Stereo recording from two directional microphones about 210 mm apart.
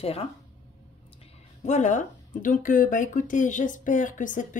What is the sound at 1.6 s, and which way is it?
A woman's voice, 35° left (ahead or behind).